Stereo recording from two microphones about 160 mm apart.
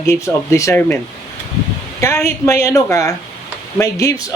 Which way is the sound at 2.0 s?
20° left (ahead or behind).